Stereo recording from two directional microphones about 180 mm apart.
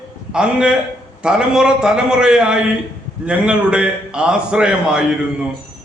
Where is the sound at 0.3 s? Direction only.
5° right (ahead or behind).